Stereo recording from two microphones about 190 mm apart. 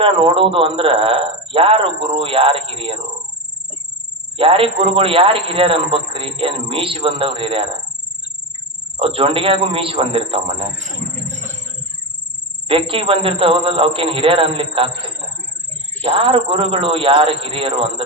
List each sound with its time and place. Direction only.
0.0 s speech: 30° right (ahead or behind)
4.4 s speech: 30° right (ahead or behind)
9.0 s speech: 30° right (ahead or behind)
12.6 s speech: 30° right (ahead or behind)